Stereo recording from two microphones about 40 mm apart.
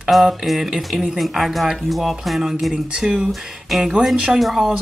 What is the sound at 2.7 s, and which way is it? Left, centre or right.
Speech, centre.